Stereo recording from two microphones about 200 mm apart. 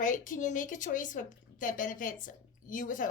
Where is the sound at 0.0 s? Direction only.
40° left (ahead or behind).